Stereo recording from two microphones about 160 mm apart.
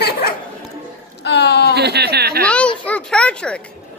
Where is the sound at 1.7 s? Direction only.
90° right.